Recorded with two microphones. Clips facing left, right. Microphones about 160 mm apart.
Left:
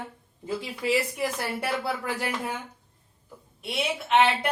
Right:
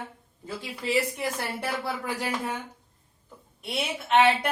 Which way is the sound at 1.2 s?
Centre (ahead or behind).